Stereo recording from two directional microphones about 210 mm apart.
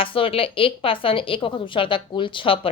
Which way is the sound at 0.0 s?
25° left (ahead or behind).